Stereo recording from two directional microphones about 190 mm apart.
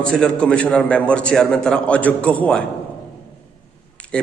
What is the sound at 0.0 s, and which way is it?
A man's voice, 5° left (ahead or behind).